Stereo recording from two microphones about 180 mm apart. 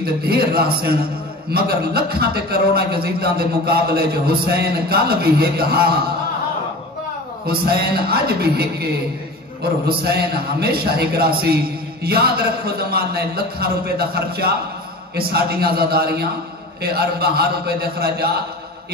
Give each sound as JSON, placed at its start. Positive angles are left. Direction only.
{"t": 0.0, "sound": "a man's voice", "side_deg": -60}
{"t": 7.4, "sound": "a man's voice", "side_deg": -60}